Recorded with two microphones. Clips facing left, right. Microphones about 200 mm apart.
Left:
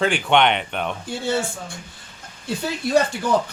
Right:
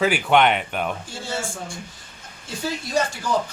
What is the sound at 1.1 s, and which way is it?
Speech, 60° left (ahead or behind).